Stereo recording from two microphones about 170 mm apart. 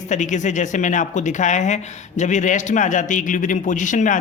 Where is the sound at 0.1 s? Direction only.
45° left (ahead or behind).